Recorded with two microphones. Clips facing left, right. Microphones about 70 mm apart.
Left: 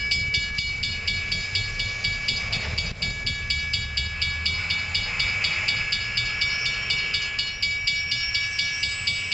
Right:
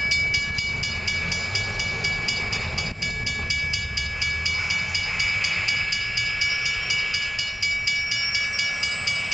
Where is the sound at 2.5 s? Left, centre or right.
Centre.